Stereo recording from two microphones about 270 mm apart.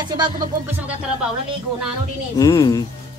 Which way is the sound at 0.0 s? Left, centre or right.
Centre.